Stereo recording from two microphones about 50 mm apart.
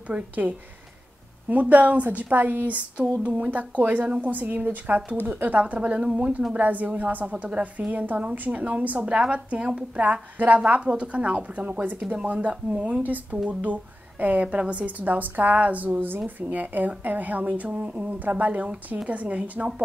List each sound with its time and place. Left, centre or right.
0.1 s a woman's voice: right
1.5 s a woman's voice: right
13.0 s a woman's voice: right